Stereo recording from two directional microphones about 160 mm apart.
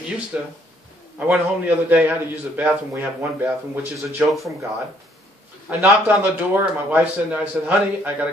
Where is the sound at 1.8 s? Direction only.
10° right (ahead or behind).